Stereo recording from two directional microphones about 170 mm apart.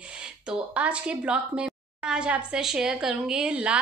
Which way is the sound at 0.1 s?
5° right (ahead or behind).